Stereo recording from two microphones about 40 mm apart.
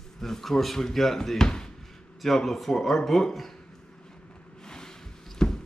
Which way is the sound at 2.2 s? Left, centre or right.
Centre.